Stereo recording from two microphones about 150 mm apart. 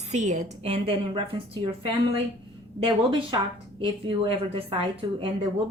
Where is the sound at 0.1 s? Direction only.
55° right (ahead or behind); by 1.4 s 35° right (ahead or behind).